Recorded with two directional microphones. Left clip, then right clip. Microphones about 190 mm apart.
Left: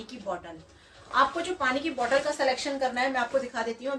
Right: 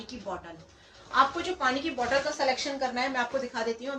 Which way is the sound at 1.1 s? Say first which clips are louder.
Even; 20° left (ahead or behind).